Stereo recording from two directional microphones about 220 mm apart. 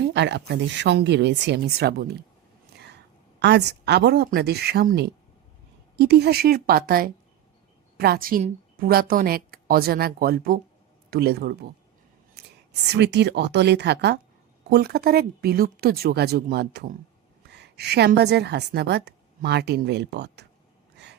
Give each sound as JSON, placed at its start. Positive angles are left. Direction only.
{"t": 0.0, "sound": "a woman's voice", "side_deg": -55}
{"t": 2.7, "sound": "whispering", "side_deg": -50}
{"t": 3.4, "sound": "a woman's voice", "side_deg": -50}
{"t": 12.9, "sound": "a woman's voice", "side_deg": -50}